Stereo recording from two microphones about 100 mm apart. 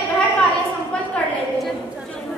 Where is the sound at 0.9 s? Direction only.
10° left (ahead or behind).